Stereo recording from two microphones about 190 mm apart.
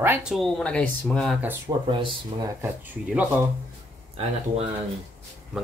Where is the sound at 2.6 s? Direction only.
10° right (ahead or behind).